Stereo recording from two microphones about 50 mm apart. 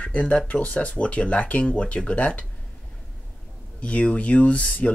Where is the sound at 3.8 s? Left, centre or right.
Left.